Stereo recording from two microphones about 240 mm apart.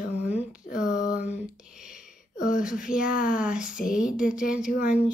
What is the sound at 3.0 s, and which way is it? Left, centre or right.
Speech, left.